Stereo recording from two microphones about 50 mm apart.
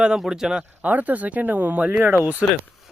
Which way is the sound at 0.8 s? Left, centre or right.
Right.